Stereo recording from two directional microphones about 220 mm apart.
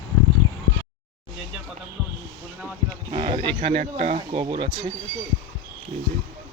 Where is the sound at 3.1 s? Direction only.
20° right (ahead or behind).